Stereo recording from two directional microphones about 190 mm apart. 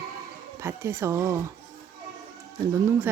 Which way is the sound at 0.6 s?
15° right (ahead or behind).